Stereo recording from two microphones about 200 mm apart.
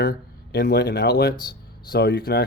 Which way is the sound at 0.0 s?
55° left (ahead or behind).